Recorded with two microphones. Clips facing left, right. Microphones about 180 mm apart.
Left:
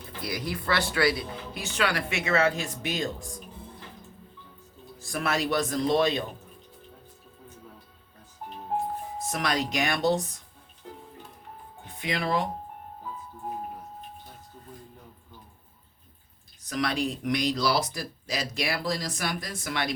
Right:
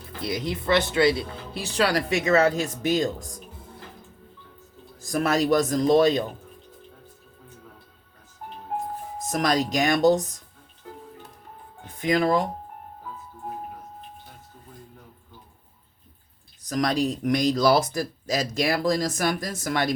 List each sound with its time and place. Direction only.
0.2 s speech: 25° right (ahead or behind)
1.5 s speech: 35° right (ahead or behind)
4.9 s speech: 40° right (ahead or behind)
9.3 s speech: 40° right (ahead or behind)
11.9 s speech: 45° right (ahead or behind)
16.6 s speech: 40° right (ahead or behind)